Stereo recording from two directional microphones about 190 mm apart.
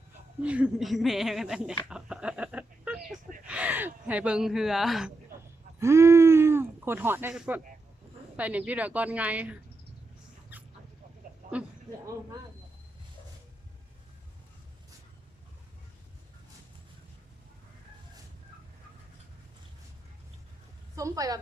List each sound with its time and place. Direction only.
0.4 s speech: 5° right (ahead or behind)
1.9 s a sound: 5° right (ahead or behind)
3.4 s speech: 5° right (ahead or behind)
5.8 s a woman's voice: 15° right (ahead or behind)
10.5 s dog: 10° right (ahead or behind)
20.9 s a woman's voice: 15° right (ahead or behind)